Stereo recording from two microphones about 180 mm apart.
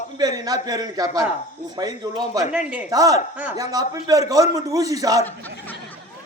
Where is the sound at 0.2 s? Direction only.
20° right (ahead or behind).